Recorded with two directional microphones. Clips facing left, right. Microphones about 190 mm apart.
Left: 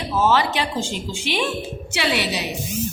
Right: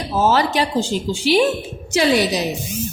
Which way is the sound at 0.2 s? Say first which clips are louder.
Right 3 dB; 40° right (ahead or behind).